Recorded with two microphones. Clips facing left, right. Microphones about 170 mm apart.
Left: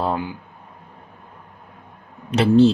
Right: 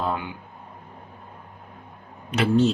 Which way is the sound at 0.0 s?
35° left (ahead or behind).